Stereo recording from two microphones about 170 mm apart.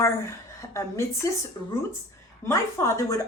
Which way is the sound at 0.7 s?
20° left (ahead or behind).